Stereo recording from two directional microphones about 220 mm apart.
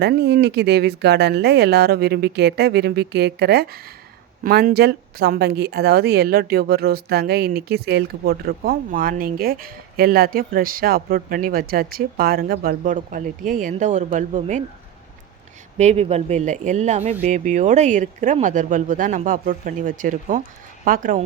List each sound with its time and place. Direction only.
0.0 s speech: 50° right (ahead or behind)
15.8 s speech: 30° right (ahead or behind)